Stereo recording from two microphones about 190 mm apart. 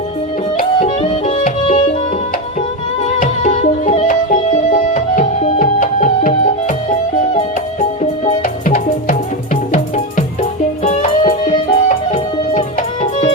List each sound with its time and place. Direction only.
1.5 s music: 40° left (ahead or behind)
3.0 s music: 40° left (ahead or behind)
10.8 s music: 35° left (ahead or behind)